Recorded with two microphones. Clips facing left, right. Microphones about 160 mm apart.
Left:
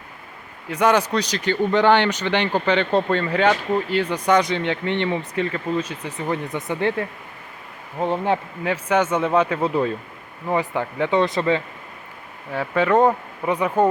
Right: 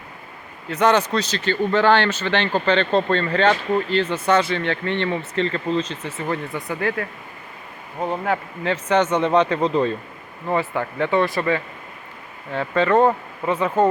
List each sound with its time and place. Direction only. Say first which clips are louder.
0.7 s speech: even; 10° left (ahead or behind)
7.9 s speech: left 2 dB; centre (ahead or behind)